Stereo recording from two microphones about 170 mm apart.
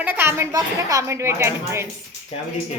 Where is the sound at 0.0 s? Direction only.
15° right (ahead or behind).